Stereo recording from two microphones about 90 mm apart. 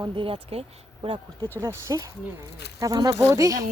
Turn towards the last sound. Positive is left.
turn(degrees=-40)  # may be behind; listen again after turning